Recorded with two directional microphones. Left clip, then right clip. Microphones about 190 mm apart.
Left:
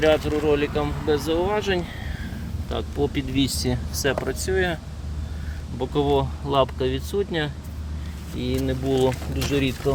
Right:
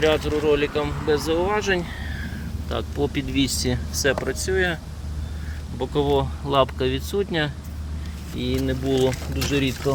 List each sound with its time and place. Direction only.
0.0 s speech: 25° left (ahead or behind)
2.2 s speech: 5° right (ahead or behind)
5.8 s speech: 10° left (ahead or behind)
6.5 s speech: 5° right (ahead or behind)
8.4 s speech: centre (ahead or behind)